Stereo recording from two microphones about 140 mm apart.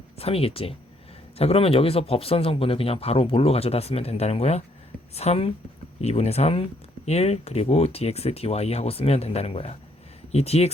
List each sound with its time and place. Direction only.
0.2 s speech: 45° left (ahead or behind)